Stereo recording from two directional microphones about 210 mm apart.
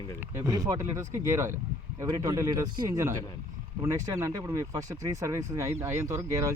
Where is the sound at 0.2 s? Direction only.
15° right (ahead or behind).